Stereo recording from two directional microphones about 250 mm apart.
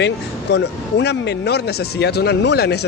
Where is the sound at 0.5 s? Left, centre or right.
Left.